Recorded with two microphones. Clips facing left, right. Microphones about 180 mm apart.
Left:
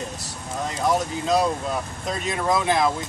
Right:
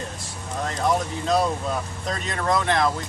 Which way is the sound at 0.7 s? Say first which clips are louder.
Left 1 dB; centre (ahead or behind).